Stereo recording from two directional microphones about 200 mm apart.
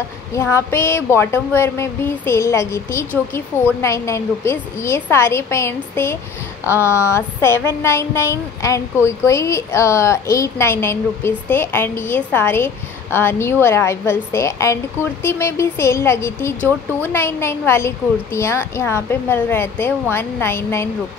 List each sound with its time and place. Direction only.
0.3 s speech: 15° left (ahead or behind)